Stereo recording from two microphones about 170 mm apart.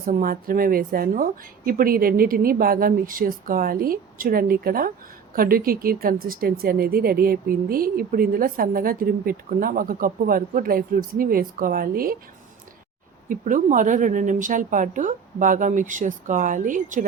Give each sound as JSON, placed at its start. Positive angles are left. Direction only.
{"t": 0.0, "sound": "speech", "side_deg": -55}
{"t": 13.2, "sound": "a woman's voice", "side_deg": -50}